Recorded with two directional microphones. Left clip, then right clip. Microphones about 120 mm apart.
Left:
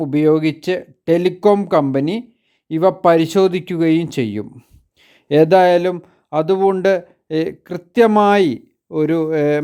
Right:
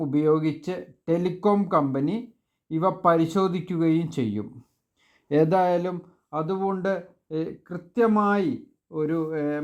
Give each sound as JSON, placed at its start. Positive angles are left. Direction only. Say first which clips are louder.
{"t": 0.0, "sound": "speech", "louder": "left 8 dB", "side_deg": 45}